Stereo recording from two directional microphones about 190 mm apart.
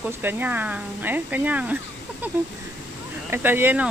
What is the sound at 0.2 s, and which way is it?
Speech, 10° right (ahead or behind).